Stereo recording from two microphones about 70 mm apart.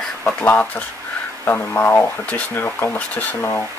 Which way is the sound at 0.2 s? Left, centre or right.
Left.